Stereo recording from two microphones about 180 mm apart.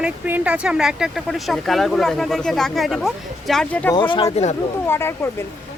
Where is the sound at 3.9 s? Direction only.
25° left (ahead or behind).